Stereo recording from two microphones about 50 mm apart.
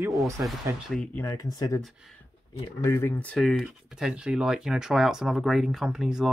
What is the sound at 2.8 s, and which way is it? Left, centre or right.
Speech, left.